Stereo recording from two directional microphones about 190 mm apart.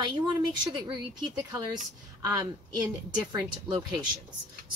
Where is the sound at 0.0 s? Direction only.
25° right (ahead or behind).